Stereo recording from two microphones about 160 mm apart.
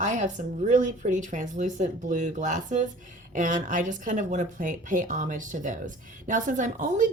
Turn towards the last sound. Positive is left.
turn(degrees=-55)  # may be behind; listen again after turning